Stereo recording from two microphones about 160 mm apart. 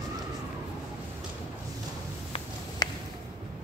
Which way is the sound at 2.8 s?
25° left (ahead or behind).